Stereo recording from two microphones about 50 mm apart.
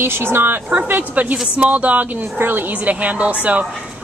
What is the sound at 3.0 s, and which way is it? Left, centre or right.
Speech, right.